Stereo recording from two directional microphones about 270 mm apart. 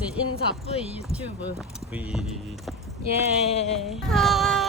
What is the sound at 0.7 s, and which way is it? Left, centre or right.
Speech, left.